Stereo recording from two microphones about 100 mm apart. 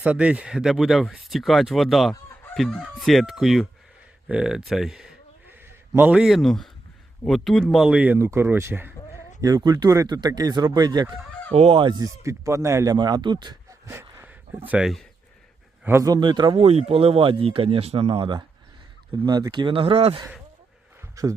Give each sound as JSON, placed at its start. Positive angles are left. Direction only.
{"t": 0.0, "sound": "speech", "side_deg": -10}
{"t": 9.4, "sound": "a man's voice", "side_deg": -40}
{"t": 11.5, "sound": "fowl", "side_deg": -80}
{"t": 11.9, "sound": "a man's voice", "side_deg": -40}
{"t": 12.2, "sound": "a man's voice", "side_deg": -30}
{"t": 13.0, "sound": "speech", "side_deg": -45}
{"t": 13.7, "sound": "a sound", "side_deg": -30}
{"t": 16.0, "sound": "speech", "side_deg": -45}
{"t": 16.6, "sound": "speech", "side_deg": -90}
{"t": 19.2, "sound": "speech", "side_deg": -45}
{"t": 21.2, "sound": "a man's voice", "side_deg": -35}